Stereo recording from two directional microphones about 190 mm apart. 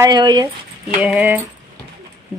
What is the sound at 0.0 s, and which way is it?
Speech, 25° right (ahead or behind).